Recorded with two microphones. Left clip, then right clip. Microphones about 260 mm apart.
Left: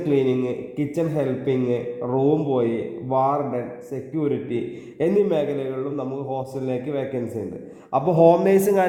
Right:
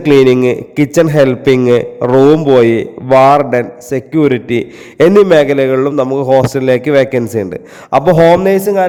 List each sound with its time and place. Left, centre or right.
0.1 s a man's voice: right